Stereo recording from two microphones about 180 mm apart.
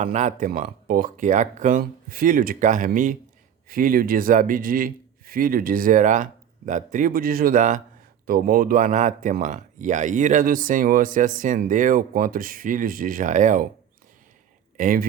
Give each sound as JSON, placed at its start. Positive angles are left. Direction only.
{"t": 0.0, "sound": "speech", "side_deg": -40}
{"t": 14.8, "sound": "speech", "side_deg": -45}